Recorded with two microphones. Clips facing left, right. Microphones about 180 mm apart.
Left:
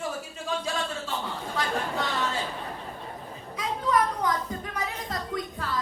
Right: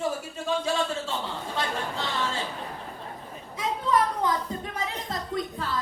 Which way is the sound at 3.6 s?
25° right (ahead or behind).